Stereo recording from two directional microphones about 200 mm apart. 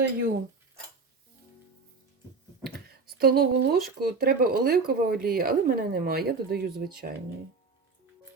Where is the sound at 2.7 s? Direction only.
50° right (ahead or behind).